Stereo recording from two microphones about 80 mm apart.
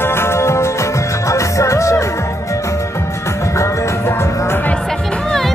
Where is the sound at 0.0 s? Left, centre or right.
Left.